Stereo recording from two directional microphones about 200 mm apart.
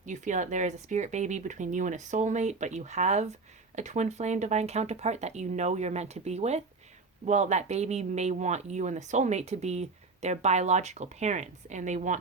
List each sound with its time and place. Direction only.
0.0 s speech: 40° right (ahead or behind)